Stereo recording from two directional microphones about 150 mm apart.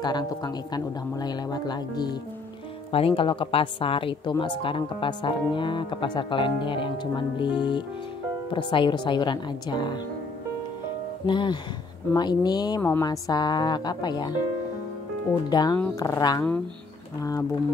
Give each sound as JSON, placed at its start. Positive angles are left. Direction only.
{"t": 0.0, "sound": "speech", "side_deg": 25}
{"t": 2.9, "sound": "speech", "side_deg": 40}
{"t": 11.2, "sound": "speech", "side_deg": 30}
{"t": 15.5, "sound": "speech", "side_deg": 25}